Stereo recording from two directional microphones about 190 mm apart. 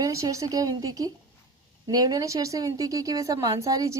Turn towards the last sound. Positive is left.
turn(degrees=-20)  # may be behind; listen again after turning